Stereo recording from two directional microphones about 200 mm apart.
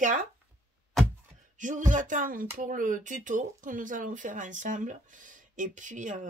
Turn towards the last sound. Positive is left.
turn(degrees=-40)  # may be behind; listen again after turning